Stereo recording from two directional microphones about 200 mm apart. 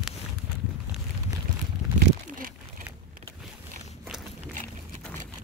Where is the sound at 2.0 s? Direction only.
45° right (ahead or behind).